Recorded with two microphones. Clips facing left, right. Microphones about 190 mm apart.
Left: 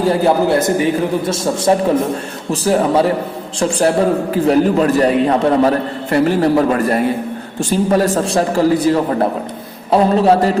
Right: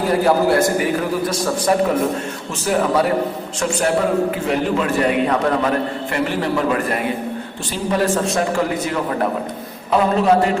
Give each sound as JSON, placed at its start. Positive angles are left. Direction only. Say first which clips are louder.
{"t": 0.1, "sound": "a man's voice", "louder": "even", "side_deg": 25}